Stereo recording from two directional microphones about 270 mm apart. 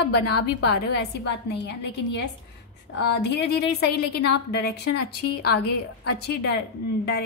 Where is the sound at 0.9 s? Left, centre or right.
Left.